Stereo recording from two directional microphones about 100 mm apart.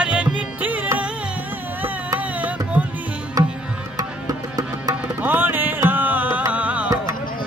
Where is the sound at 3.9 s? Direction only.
40° right (ahead or behind).